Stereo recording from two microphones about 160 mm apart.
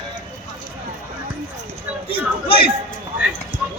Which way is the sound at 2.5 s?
35° left (ahead or behind).